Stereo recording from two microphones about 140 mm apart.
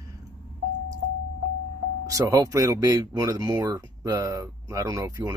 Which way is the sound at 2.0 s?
25° right (ahead or behind).